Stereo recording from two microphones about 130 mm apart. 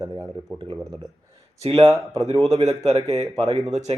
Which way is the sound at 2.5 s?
55° right (ahead or behind).